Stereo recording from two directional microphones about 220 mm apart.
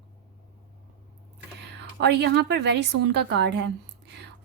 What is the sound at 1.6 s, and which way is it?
A woman's voice, 50° right (ahead or behind).